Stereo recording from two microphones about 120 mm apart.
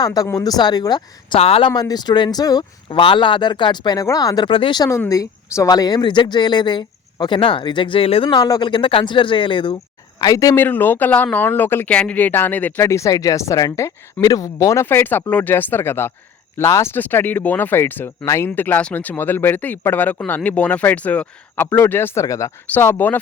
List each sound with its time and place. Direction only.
0.0 s speech: 30° left (ahead or behind)
1.4 s speech: 55° left (ahead or behind)
1.7 s speech: 35° left (ahead or behind)
2.9 s speech: 45° left (ahead or behind)
4.5 s speech: 45° left (ahead or behind)
4.8 s speech: 25° left (ahead or behind); by 9.7 s 40° left (ahead or behind)
10.2 s speech: 30° left (ahead or behind)